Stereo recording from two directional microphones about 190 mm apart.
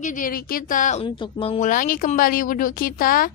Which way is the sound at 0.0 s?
45° left (ahead or behind).